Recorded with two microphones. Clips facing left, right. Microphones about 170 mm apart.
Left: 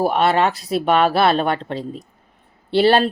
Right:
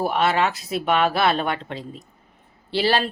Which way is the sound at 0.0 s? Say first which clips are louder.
Left 4 dB; 35° left (ahead or behind).